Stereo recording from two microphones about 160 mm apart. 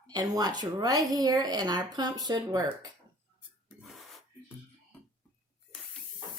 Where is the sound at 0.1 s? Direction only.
25° right (ahead or behind).